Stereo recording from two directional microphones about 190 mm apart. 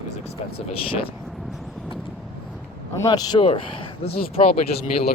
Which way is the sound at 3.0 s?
20° left (ahead or behind).